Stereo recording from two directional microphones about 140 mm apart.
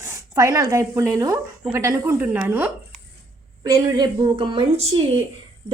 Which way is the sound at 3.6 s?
30° right (ahead or behind).